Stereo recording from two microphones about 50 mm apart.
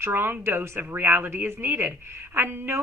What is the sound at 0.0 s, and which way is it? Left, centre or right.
Speech, right.